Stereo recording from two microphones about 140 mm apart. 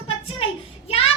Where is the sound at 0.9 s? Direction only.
45° left (ahead or behind).